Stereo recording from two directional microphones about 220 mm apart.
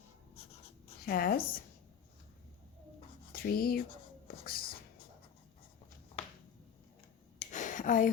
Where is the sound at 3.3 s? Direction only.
40° left (ahead or behind).